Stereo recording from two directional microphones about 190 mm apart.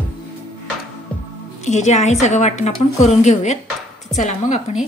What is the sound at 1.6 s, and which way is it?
A woman's voice, 35° left (ahead or behind).